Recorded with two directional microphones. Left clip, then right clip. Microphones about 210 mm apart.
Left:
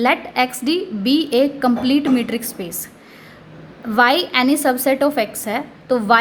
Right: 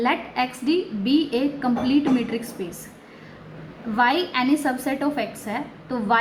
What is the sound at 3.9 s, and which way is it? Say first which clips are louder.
A woman's voice: left 6 dB; 50° left (ahead or behind).